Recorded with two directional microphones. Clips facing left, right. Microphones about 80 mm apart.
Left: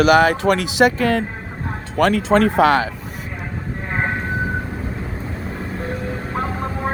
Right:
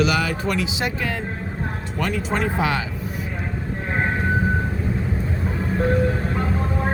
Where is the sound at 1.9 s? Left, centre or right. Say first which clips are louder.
Left 9 dB; left.